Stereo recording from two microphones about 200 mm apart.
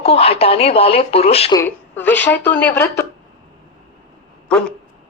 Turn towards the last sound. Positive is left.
turn(degrees=5)  # may be behind; listen again after turning